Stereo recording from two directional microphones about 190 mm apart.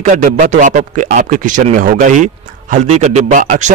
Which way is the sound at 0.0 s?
45° right (ahead or behind).